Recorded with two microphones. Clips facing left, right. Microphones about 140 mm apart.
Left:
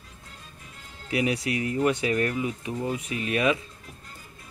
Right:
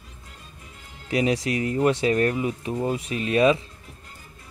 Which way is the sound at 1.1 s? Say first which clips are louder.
Right 3 dB; 30° right (ahead or behind).